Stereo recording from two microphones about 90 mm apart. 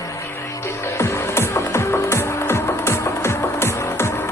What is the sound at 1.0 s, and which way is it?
Music, 30° left (ahead or behind).